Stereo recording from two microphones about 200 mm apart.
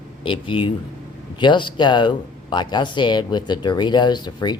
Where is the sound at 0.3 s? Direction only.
25° left (ahead or behind).